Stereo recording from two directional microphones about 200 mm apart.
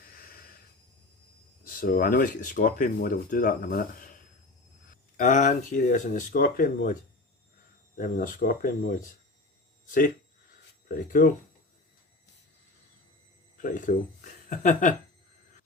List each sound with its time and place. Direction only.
1.6 s speech: 45° left (ahead or behind)
7.9 s speech: 45° left (ahead or behind)
13.6 s speech: 40° left (ahead or behind)